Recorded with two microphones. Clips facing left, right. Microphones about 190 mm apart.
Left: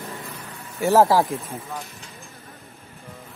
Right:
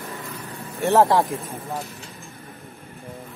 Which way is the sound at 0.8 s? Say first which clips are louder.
Left 1 dB; 5° left (ahead or behind).